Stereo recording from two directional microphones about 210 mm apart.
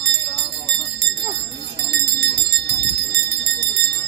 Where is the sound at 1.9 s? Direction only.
50° right (ahead or behind).